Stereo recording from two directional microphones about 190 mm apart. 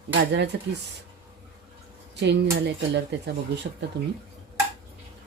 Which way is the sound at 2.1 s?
65° right (ahead or behind).